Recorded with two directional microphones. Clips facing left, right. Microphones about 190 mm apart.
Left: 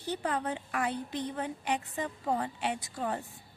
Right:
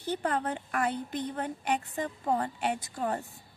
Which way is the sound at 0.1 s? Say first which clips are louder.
Right 2 dB; 50° right (ahead or behind).